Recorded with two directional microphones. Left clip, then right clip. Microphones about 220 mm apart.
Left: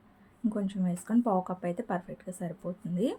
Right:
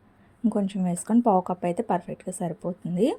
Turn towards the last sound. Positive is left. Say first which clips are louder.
# right 7 dB
turn(degrees=-30)  # may be behind; listen again after turning